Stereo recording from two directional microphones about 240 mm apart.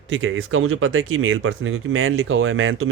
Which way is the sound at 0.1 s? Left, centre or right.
Right.